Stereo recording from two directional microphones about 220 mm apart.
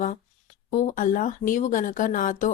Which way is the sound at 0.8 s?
35° left (ahead or behind).